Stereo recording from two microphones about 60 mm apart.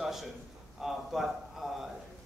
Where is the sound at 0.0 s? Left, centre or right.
Centre.